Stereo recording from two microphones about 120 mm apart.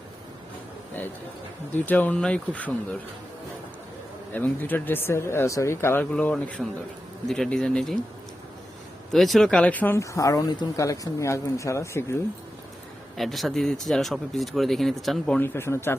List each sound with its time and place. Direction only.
1.7 s speech: 15° left (ahead or behind)
4.4 s speech: 15° left (ahead or behind)
9.1 s speech: centre (ahead or behind)
10.0 s a woman's voice: 30° left (ahead or behind)
13.1 s speech: centre (ahead or behind)
15.4 s a woman's voice: 20° left (ahead or behind)